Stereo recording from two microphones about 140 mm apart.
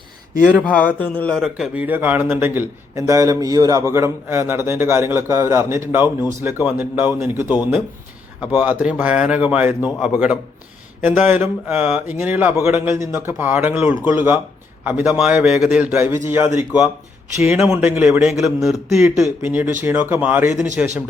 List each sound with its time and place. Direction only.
0.9 s speech: 10° left (ahead or behind)
1.4 s a man's voice: 5° right (ahead or behind)
19.4 s a man's voice: 15° right (ahead or behind)